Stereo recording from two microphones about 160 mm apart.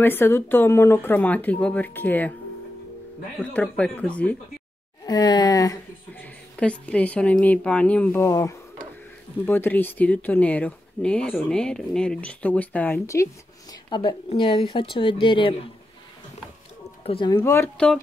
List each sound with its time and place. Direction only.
0.0 s speech: 15° left (ahead or behind)
3.5 s speech: 5° left (ahead or behind)
5.0 s speech: 25° left (ahead or behind)
6.1 s speech: 10° left (ahead or behind)
13.8 s speech: 30° left (ahead or behind)
17.0 s speech: 35° left (ahead or behind)
17.3 s speech: 15° left (ahead or behind)